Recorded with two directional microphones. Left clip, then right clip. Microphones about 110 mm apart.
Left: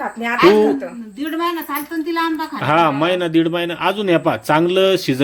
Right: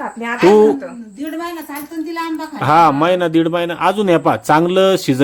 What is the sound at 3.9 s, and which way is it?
Speech, 40° right (ahead or behind).